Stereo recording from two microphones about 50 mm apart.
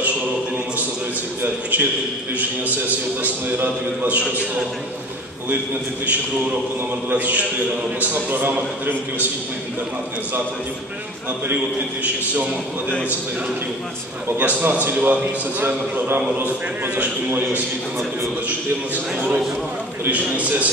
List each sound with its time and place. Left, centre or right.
1.4 s a man's voice: right
3.2 s a man's voice: right
7.1 s a man's voice: right
11.5 s a man's voice: right
14.4 s a man's voice: right
16.9 s a man's voice: right
19.1 s a man's voice: right